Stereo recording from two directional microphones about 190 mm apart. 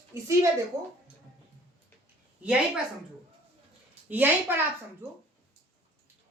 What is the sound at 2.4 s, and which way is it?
Speech, 5° right (ahead or behind).